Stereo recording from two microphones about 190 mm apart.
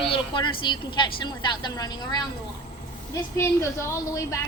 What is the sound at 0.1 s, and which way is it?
A woman's voice, 25° left (ahead or behind).